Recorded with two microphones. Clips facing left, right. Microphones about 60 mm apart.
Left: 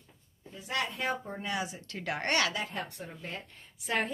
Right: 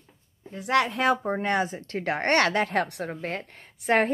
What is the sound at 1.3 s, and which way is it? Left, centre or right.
A woman's voice, right.